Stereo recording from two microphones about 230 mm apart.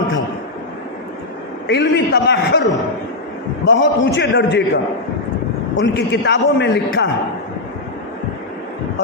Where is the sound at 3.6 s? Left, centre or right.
Left.